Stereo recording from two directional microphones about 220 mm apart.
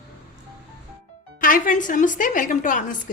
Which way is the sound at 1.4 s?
40° left (ahead or behind).